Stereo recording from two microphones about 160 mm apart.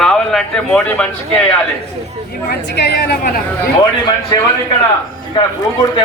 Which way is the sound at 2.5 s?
90° left.